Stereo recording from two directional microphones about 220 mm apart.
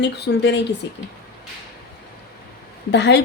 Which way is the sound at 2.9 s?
50° left (ahead or behind).